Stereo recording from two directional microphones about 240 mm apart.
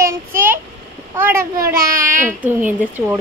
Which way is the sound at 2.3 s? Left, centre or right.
Centre.